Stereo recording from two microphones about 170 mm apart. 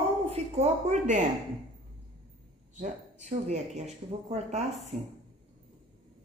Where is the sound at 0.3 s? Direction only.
40° right (ahead or behind).